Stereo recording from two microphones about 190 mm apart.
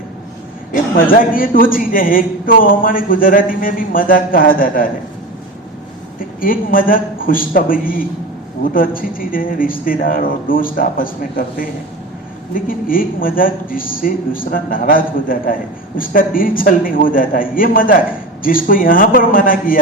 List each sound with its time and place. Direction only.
0.9 s a man's voice: 45° left (ahead or behind)
6.1 s a man's voice: 45° left (ahead or behind)